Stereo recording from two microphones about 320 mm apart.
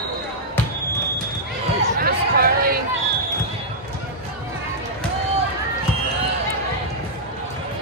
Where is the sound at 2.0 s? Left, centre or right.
Right.